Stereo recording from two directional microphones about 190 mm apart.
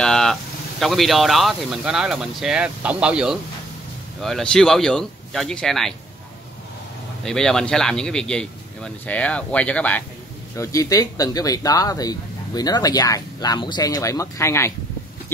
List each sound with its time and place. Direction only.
0.0 s speech: 5° left (ahead or behind)
7.2 s speech: 5° left (ahead or behind)